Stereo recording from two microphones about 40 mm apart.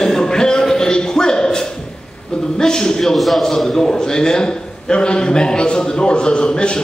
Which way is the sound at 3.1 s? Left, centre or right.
Centre.